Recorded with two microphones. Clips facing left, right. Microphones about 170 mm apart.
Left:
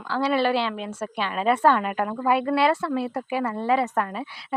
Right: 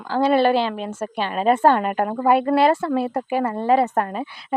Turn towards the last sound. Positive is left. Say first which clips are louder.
# right 4 dB
turn(degrees=-45)  # may be behind; listen again after turning